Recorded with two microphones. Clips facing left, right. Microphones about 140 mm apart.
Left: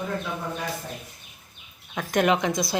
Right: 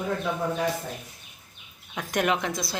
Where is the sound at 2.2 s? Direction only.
Centre (ahead or behind).